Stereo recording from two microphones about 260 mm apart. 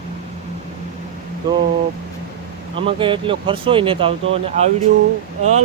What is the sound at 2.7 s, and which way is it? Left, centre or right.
Speech, centre.